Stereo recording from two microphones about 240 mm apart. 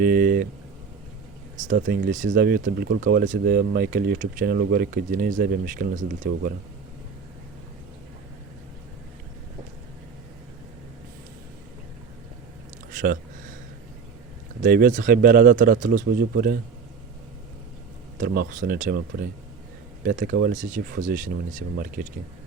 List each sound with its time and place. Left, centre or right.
0.0 s speech: right
1.8 s speech: right
14.6 s speech: right
18.2 s speech: right